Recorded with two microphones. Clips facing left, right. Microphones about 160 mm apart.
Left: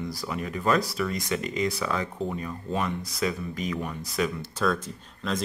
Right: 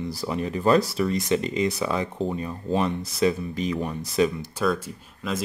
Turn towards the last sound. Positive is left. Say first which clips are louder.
# right 1 dB
turn(degrees=-10)  # may be behind; listen again after turning